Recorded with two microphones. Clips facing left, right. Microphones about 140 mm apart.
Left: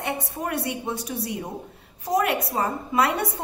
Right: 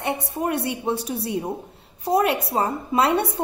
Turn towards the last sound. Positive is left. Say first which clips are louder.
# right 3 dB
turn(degrees=-30)  # may be behind; listen again after turning